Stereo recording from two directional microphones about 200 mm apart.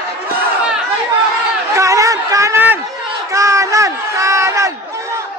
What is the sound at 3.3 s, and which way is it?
Crowd, 15° right (ahead or behind).